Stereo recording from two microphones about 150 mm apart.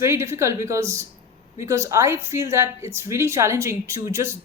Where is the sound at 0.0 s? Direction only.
20° right (ahead or behind).